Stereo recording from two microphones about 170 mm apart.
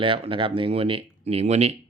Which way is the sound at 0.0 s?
30° right (ahead or behind).